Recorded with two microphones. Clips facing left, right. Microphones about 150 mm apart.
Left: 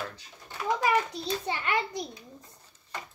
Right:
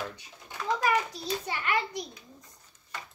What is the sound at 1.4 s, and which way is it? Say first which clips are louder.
Speech: even; 25° left (ahead or behind).